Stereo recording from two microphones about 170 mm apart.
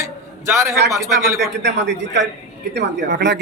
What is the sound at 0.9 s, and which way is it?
Speech, 20° right (ahead or behind).